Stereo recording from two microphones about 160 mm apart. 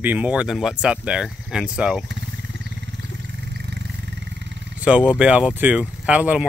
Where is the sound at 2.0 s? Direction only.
90° right.